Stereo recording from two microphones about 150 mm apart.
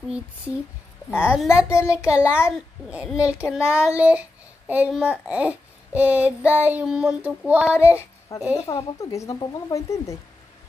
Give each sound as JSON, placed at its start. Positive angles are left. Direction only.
{"t": 1.2, "sound": "a child's voice", "side_deg": -5}
{"t": 1.7, "sound": "speech", "side_deg": 20}
{"t": 2.0, "sound": "a child's voice", "side_deg": -10}
{"t": 8.3, "sound": "speech", "side_deg": 20}